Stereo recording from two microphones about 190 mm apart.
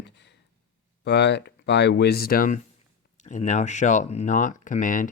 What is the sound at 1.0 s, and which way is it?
Speech, 65° left (ahead or behind).